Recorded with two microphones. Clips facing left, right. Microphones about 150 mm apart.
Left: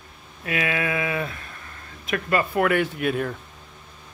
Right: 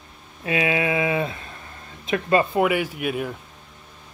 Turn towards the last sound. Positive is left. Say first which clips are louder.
# left 1 dB
turn(degrees=-5)  # may be behind; listen again after turning